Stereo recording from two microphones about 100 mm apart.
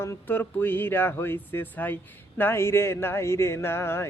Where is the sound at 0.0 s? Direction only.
25° left (ahead or behind).